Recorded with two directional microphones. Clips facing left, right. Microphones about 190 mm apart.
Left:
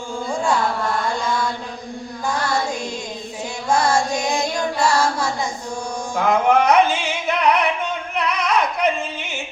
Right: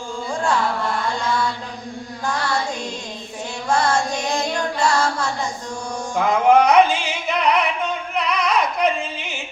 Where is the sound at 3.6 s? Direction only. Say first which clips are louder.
Left 1 dB; 10° left (ahead or behind).